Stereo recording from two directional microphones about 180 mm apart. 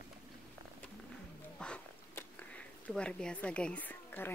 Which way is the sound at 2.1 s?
10° left (ahead or behind).